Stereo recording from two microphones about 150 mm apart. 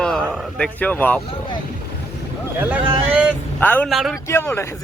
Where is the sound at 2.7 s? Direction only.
10° right (ahead or behind).